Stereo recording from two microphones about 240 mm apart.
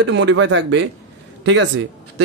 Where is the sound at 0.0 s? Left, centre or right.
Right.